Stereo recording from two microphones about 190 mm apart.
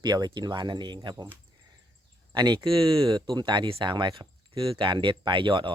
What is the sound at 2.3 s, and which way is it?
Speech, 25° right (ahead or behind).